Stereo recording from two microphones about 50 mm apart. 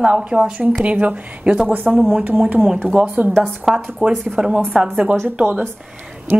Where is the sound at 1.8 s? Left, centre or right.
Centre.